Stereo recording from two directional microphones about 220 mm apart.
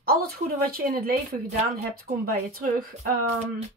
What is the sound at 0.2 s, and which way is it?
Speech, 40° right (ahead or behind).